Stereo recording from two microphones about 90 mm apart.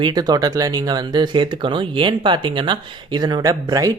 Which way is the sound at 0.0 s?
50° right (ahead or behind).